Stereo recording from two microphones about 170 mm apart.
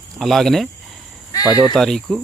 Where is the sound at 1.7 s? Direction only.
Centre (ahead or behind).